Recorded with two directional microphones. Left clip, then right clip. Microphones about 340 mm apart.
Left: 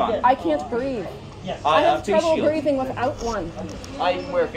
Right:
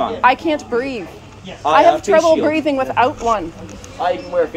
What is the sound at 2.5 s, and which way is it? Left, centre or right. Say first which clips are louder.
Speech: right 4 dB; centre.